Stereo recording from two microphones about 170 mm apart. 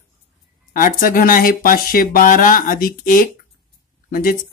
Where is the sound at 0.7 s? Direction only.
55° left (ahead or behind).